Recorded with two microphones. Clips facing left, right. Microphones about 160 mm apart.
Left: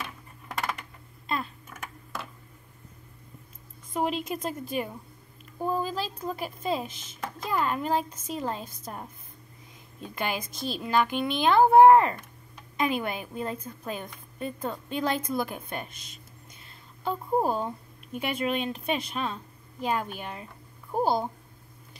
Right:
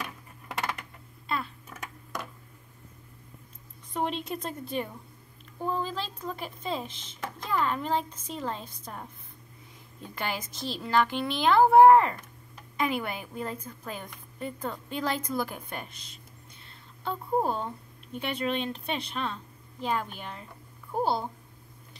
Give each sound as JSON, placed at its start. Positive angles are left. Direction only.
{"t": 3.9, "sound": "a woman's voice", "side_deg": 5}
{"t": 17.0, "sound": "speech", "side_deg": 10}